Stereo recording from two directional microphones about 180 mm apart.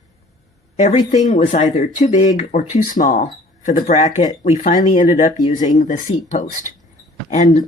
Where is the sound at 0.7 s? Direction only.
40° left (ahead or behind).